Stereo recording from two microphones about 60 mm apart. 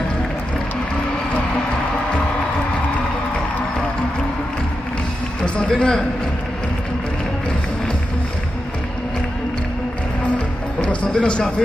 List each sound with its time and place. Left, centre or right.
5.7 s a man's voice: centre
10.8 s music: centre